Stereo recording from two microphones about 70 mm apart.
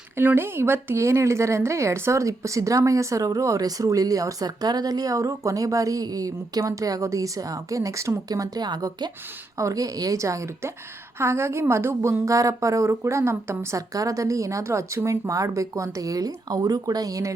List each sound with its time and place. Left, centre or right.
0.2 s speech: right
8.3 s speech: right
9.6 s a woman's voice: right
13.7 s speech: right